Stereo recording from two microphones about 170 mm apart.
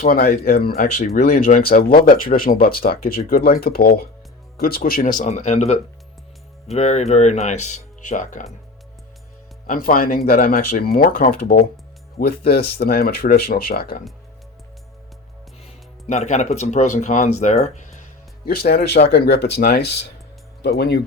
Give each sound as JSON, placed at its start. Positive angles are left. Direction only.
{"t": 0.1, "sound": "speech", "side_deg": 55}
{"t": 0.9, "sound": "speech", "side_deg": 45}
{"t": 1.4, "sound": "speech", "side_deg": 55}
{"t": 9.6, "sound": "speech", "side_deg": 55}
{"t": 16.0, "sound": "speech", "side_deg": 40}
{"t": 18.4, "sound": "speech", "side_deg": 65}